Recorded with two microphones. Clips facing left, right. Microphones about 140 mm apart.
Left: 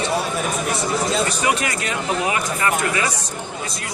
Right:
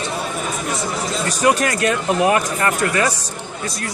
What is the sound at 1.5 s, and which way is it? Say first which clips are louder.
Speech: right 6 dB; 50° right (ahead or behind).